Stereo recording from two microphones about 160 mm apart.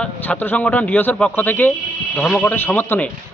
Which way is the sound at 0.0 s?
10° left (ahead or behind).